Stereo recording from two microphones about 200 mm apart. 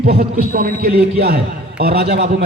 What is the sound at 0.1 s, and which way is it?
A man's voice, 45° right (ahead or behind).